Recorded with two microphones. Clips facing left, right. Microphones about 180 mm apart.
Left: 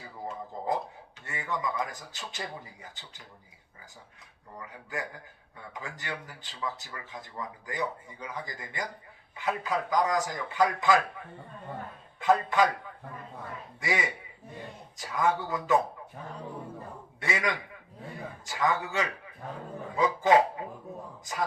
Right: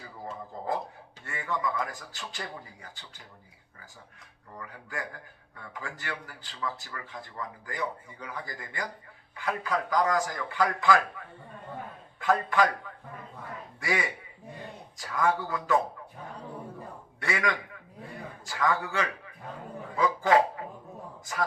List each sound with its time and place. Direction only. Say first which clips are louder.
0.5 s speech: left 1 dB; 20° left (ahead or behind)
4.5 s speech: left 1 dB; 20° left (ahead or behind)
12.2 s speech: left 1 dB; 20° left (ahead or behind)
13.7 s speech: even; 20° left (ahead or behind)
17.2 s speech: right 1 dB; 20° left (ahead or behind)